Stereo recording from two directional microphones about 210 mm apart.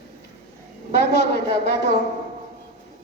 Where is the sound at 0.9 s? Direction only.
50° left (ahead or behind).